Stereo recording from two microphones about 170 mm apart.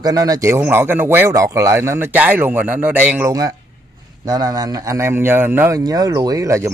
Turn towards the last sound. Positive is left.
turn(degrees=-15)  # may be behind; listen again after turning